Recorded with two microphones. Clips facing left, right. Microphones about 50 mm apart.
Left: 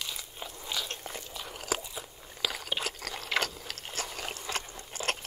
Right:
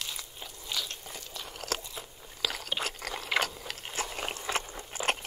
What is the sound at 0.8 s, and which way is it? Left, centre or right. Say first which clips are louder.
Biting: left 3 dB; left.